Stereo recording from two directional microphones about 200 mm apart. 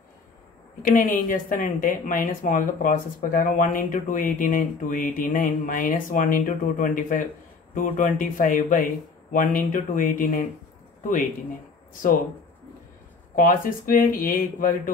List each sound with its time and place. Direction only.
0.9 s speech: 40° left (ahead or behind)
13.4 s speech: 45° left (ahead or behind)